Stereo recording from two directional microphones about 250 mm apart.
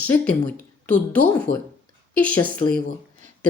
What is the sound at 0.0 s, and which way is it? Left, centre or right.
A woman's voice, centre.